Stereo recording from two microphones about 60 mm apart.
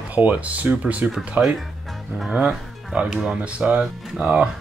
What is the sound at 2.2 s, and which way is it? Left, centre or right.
Speech, centre.